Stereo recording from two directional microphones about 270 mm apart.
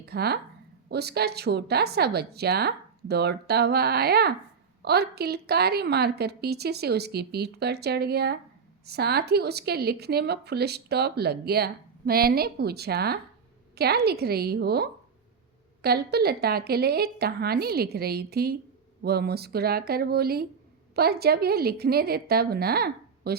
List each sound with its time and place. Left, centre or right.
0.0 s speech: right